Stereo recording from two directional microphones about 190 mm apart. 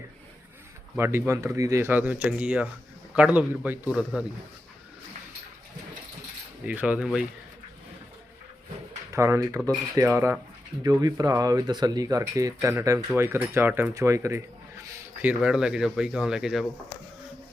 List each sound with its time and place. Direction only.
0.9 s speech: 15° right (ahead or behind)
6.7 s speech: 5° right (ahead or behind)
9.1 s speech: 15° right (ahead or behind)